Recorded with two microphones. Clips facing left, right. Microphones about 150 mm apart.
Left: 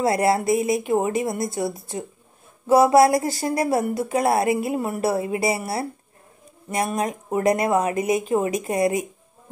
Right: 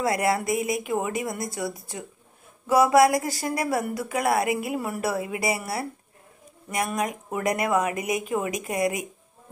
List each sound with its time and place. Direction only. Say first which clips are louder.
0.0 s speech: left 4 dB; 30° left (ahead or behind)